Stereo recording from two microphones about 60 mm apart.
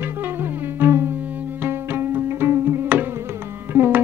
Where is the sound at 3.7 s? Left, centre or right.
Right.